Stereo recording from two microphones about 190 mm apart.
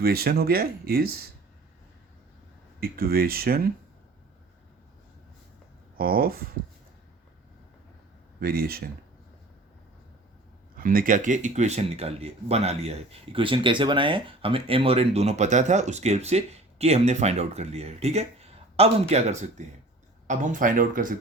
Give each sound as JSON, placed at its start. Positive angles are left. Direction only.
{"t": 0.0, "sound": "speech", "side_deg": -55}
{"t": 2.8, "sound": "speech", "side_deg": -50}
{"t": 6.0, "sound": "speech", "side_deg": -50}
{"t": 8.4, "sound": "speech", "side_deg": -50}
{"t": 10.8, "sound": "speech", "side_deg": -45}